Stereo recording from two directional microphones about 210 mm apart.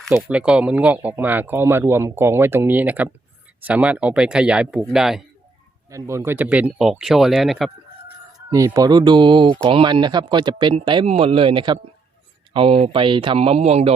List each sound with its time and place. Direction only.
0.0 s speech: 5° right (ahead or behind)
5.9 s speech: 15° right (ahead or behind)
8.4 s speech: 15° right (ahead or behind)